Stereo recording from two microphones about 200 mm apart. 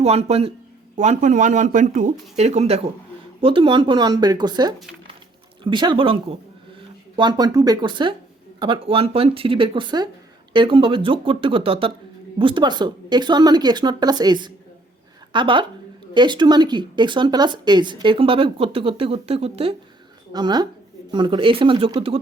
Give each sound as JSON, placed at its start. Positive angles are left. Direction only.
{"t": 0.0, "sound": "speech", "side_deg": -30}
{"t": 7.2, "sound": "a woman's voice", "side_deg": -20}